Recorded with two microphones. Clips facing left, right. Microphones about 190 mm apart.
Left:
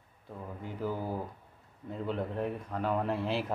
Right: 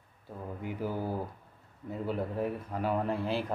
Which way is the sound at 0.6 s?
10° right (ahead or behind).